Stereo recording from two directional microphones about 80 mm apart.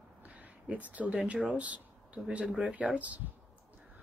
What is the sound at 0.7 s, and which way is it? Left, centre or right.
Speech, centre.